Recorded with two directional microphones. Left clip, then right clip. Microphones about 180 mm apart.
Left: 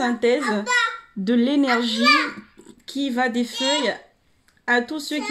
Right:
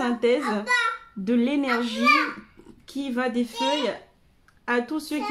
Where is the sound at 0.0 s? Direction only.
25° left (ahead or behind).